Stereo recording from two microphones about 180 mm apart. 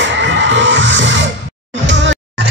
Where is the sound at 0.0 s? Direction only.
85° right.